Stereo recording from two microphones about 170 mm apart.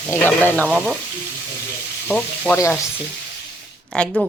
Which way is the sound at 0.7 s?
5° right (ahead or behind).